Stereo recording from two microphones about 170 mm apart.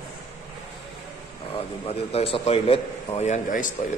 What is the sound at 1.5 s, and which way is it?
A man's voice, 35° left (ahead or behind).